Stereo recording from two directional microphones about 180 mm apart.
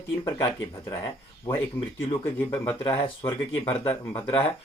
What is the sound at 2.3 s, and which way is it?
Speech, 15° left (ahead or behind).